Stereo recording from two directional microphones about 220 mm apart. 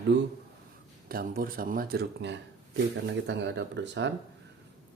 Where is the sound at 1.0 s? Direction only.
40° right (ahead or behind).